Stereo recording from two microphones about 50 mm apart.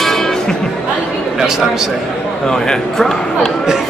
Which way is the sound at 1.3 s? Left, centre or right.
Centre.